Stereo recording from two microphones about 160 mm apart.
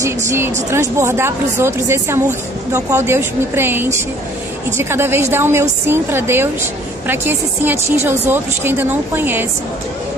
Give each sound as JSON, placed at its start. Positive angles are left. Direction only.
{"t": 0.0, "sound": "a woman's voice", "side_deg": -20}